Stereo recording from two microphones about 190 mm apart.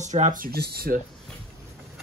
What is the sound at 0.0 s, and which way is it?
Speech, 40° right (ahead or behind).